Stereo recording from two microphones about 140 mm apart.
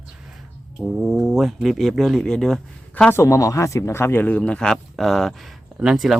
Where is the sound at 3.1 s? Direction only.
20° left (ahead or behind); by 6.2 s centre (ahead or behind).